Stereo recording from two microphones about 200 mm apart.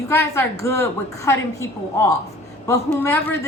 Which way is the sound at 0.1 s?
15° left (ahead or behind).